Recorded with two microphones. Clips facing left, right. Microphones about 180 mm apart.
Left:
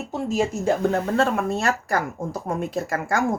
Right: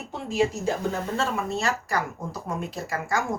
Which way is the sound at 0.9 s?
60° left (ahead or behind).